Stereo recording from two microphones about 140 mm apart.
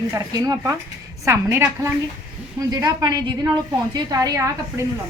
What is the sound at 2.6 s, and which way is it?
A woman's voice, 30° right (ahead or behind).